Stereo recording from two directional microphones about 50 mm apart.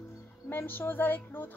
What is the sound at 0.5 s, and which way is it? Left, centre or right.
Music, left.